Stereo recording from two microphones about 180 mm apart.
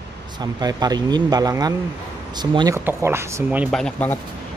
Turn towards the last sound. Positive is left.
turn(degrees=5)  # may be behind; listen again after turning